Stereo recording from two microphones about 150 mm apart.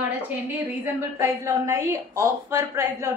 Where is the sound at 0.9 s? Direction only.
20° right (ahead or behind).